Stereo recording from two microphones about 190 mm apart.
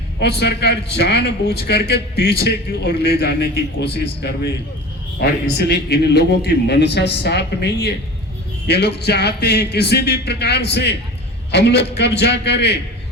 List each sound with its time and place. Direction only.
0.2 s a man's voice: 60° left (ahead or behind)